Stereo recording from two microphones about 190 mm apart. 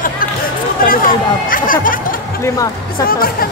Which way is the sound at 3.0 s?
50° left (ahead or behind).